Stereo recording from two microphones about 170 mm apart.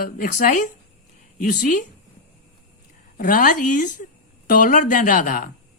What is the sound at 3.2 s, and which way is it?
A man's voice, 55° left (ahead or behind).